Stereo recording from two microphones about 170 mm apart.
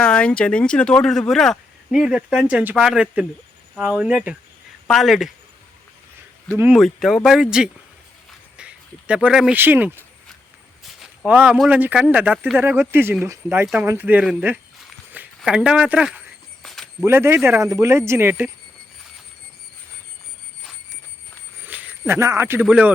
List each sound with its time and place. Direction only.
0.0 s speech: 5° left (ahead or behind)
6.5 s speech: 15° right (ahead or behind)
6.7 s speech: centre (ahead or behind)
10.8 s a sound: centre (ahead or behind)
11.5 s speech: centre (ahead or behind)
16.6 s a sound: centre (ahead or behind)
17.1 s speech: 15° right (ahead or behind)
21.7 s a sound: 10° right (ahead or behind)
22.6 s speech: 5° right (ahead or behind)